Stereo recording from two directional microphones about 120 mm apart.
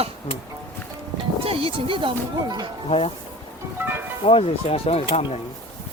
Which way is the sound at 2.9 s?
55° left (ahead or behind).